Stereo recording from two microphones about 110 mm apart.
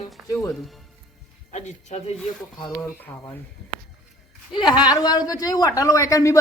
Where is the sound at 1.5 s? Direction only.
85° left.